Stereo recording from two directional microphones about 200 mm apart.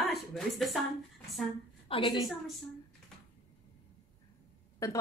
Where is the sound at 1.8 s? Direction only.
25° left (ahead or behind).